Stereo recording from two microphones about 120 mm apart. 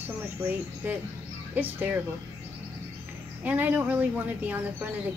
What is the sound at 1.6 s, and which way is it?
Speech, 15° right (ahead or behind).